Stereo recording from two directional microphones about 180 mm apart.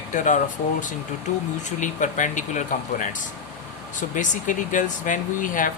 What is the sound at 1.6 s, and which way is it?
Speech, 45° left (ahead or behind).